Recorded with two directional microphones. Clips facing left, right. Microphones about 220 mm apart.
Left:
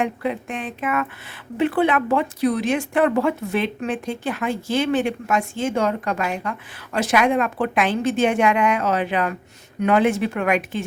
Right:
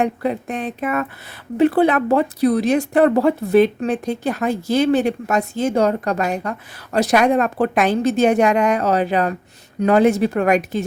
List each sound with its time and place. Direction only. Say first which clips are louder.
0.0 s speech: right 4 dB; 40° right (ahead or behind)